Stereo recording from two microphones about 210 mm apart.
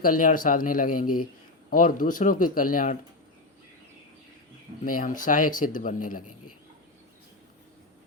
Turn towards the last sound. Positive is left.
turn(degrees=40)  # may be behind; listen again after turning